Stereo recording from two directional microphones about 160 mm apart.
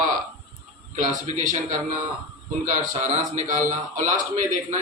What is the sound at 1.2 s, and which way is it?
A man's voice, 50° right (ahead or behind).